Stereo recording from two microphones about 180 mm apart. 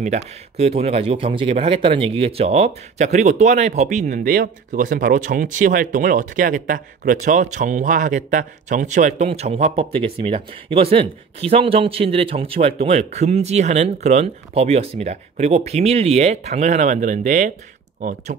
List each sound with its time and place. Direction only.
0.0 s speech: 40° right (ahead or behind)